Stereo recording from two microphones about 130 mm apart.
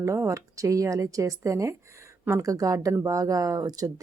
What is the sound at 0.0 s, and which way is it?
Speech, 25° right (ahead or behind).